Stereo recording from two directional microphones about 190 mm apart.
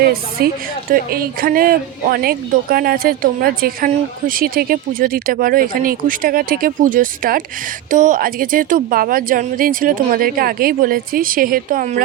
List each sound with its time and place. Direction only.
0.0 s speech: 50° right (ahead or behind)